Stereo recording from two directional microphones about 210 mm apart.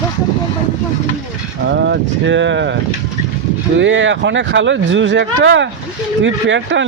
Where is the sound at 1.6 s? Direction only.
55° right (ahead or behind).